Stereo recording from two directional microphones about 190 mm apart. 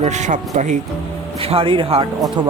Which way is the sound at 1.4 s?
30° right (ahead or behind).